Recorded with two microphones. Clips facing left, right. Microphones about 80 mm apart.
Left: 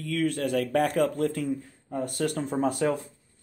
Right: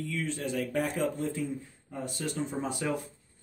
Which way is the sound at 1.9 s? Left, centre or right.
Left.